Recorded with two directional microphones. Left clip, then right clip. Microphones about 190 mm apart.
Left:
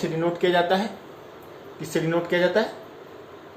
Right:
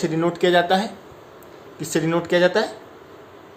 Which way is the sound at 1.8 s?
45° right (ahead or behind).